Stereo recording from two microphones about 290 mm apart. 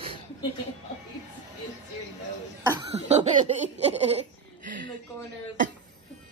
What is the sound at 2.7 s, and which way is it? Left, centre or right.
Cough, centre.